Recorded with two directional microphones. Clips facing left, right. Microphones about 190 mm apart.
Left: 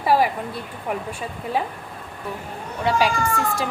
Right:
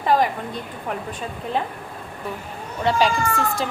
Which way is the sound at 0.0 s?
10° left (ahead or behind).